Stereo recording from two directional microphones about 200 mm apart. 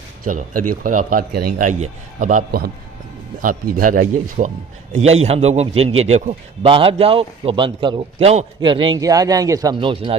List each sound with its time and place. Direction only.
0.3 s a man's voice: 40° right (ahead or behind)